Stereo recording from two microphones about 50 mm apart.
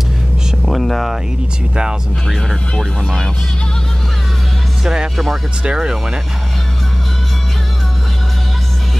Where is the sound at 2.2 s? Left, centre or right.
Centre.